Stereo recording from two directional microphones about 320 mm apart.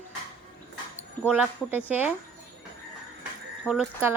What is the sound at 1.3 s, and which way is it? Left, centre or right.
Speech, centre.